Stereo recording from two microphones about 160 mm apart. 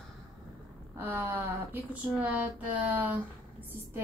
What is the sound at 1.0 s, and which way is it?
Speech, 10° right (ahead or behind).